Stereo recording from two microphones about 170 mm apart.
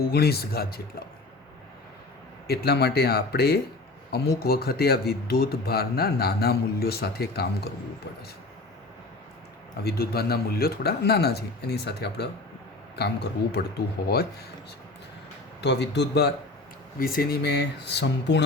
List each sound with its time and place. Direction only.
0.0 s speech: 65° left (ahead or behind)
2.5 s speech: 70° left (ahead or behind)
9.8 s speech: 65° left (ahead or behind)
15.6 s a man's voice: 85° left
17.0 s speech: 60° left (ahead or behind); by 18.4 s 90° left